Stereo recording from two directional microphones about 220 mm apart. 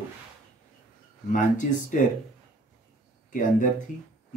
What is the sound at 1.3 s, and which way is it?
Speech, 35° left (ahead or behind).